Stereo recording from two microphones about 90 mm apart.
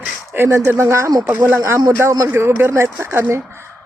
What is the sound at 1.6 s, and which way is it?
A woman's voice, 40° right (ahead or behind).